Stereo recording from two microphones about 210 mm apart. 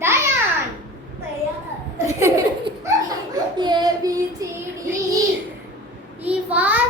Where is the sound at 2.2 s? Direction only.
15° right (ahead or behind).